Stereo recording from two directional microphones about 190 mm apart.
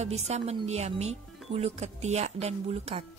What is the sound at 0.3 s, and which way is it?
Speech, 35° right (ahead or behind).